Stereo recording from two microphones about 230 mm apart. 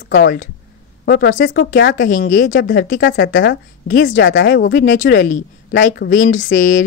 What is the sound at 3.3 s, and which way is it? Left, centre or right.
Speech, left.